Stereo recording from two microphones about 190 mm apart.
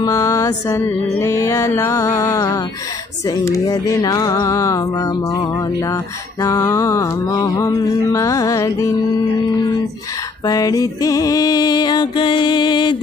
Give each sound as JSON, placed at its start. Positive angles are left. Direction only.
{"t": 0.0, "sound": "music", "side_deg": 15}
{"t": 10.4, "sound": "music", "side_deg": 20}